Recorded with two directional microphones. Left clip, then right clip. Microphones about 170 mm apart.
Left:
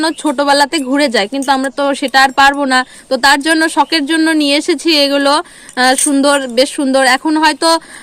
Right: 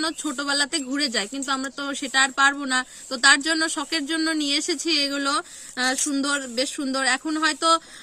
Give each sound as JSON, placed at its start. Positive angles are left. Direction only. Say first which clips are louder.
{"t": 0.0, "sound": "speech", "louder": "left 13 dB", "side_deg": -20}